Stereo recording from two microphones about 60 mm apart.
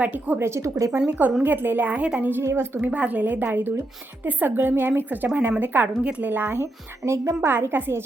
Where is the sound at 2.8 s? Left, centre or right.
Right.